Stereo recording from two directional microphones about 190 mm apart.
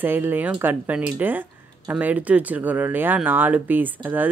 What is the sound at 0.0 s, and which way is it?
Speech, 10° right (ahead or behind).